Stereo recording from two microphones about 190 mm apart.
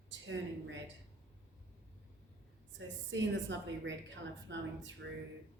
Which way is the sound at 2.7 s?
75° right (ahead or behind).